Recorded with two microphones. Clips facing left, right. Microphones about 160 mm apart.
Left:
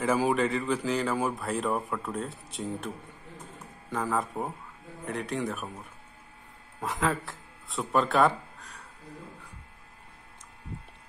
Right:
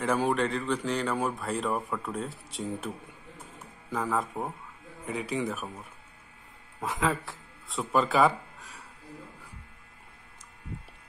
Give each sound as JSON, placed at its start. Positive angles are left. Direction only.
{"t": 0.0, "sound": "a man's voice", "side_deg": 0}
{"t": 3.9, "sound": "a man's voice", "side_deg": 0}